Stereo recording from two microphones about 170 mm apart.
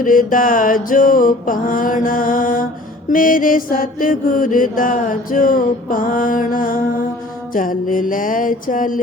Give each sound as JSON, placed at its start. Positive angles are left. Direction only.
{"t": 0.0, "sound": "mantra", "side_deg": 55}